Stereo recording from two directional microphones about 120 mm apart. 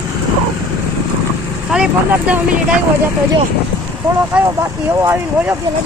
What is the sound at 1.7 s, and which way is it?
Speech, 10° right (ahead or behind).